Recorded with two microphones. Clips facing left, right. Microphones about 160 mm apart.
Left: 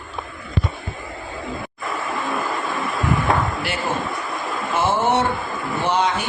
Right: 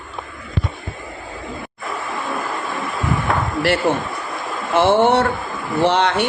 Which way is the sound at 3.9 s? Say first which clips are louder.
Right 4 dB; 65° right (ahead or behind).